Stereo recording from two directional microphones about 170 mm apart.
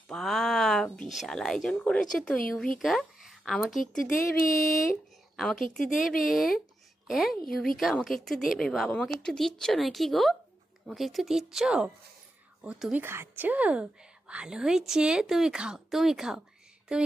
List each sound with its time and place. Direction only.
0.1 s speech: centre (ahead or behind)
4.4 s a sound: 55° left (ahead or behind)
5.4 s speech: centre (ahead or behind)